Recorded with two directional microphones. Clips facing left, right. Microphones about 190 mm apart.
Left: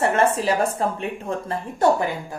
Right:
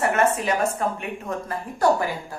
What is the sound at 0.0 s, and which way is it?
A woman's voice, 30° left (ahead or behind).